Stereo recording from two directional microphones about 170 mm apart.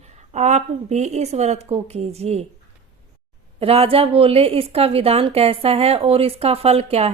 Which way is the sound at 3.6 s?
35° right (ahead or behind).